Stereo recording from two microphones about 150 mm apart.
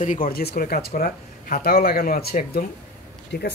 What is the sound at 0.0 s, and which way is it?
Speech, 65° left (ahead or behind).